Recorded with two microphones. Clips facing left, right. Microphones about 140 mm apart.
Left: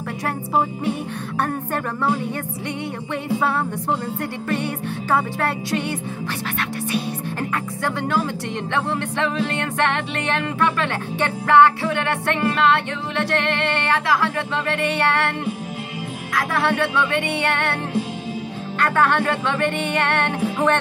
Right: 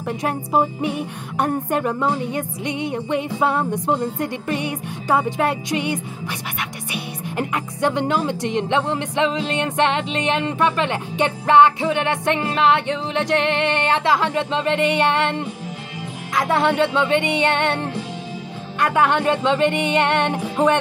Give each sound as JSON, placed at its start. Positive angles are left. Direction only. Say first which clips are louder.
{"t": 0.2, "sound": "music", "louder": "right 2 dB", "side_deg": -15}
{"t": 6.9, "sound": "speech", "louder": "left 5 dB", "side_deg": -15}
{"t": 16.3, "sound": "speech", "louder": "right 3 dB", "side_deg": -20}
{"t": 18.8, "sound": "music", "louder": "right 1 dB", "side_deg": -15}